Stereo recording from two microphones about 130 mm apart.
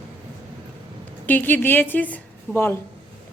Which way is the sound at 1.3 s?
15° left (ahead or behind).